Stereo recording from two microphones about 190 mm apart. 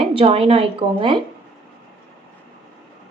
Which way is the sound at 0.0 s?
30° right (ahead or behind).